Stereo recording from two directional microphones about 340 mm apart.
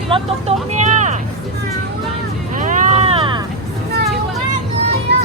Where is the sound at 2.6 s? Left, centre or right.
Right.